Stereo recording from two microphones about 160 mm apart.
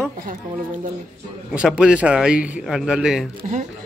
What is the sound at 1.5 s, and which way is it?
Speech, 5° right (ahead or behind).